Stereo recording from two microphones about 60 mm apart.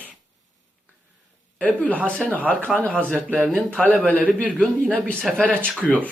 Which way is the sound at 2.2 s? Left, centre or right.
Centre.